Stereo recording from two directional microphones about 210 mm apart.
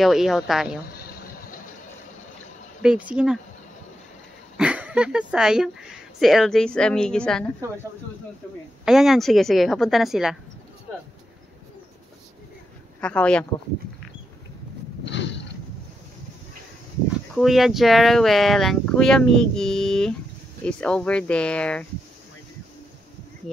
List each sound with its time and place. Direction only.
0.0 s speech: centre (ahead or behind)
2.8 s speech: 5° right (ahead or behind)
4.6 s speech: 5° right (ahead or behind)
8.8 s speech: centre (ahead or behind)
13.0 s speech: 5° left (ahead or behind)
15.0 s a sound: 60° left (ahead or behind)
17.4 s speech: centre (ahead or behind)